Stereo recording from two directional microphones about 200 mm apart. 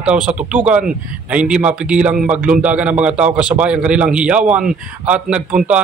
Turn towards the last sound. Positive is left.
turn(degrees=-5)  # may be behind; listen again after turning